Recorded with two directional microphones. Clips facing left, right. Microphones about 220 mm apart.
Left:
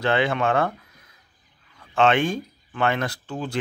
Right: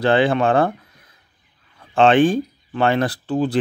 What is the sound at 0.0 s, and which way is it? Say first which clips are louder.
Speech: right 6 dB; 35° right (ahead or behind).